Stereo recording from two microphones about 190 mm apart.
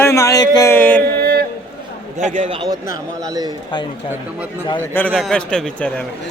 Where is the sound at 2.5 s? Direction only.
25° right (ahead or behind).